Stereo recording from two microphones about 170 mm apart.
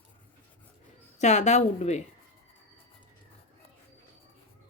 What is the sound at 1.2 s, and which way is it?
Speech, 45° left (ahead or behind).